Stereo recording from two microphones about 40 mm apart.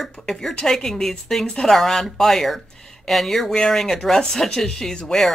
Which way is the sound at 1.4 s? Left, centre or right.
Left.